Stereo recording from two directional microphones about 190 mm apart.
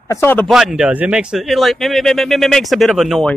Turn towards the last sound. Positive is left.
turn(degrees=0)  # may be behind; listen again after turning